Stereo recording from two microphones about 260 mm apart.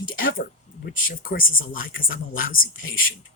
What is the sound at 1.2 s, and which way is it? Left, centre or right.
Speech, left.